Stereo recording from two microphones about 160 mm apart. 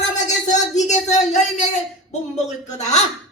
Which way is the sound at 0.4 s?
45° left (ahead or behind).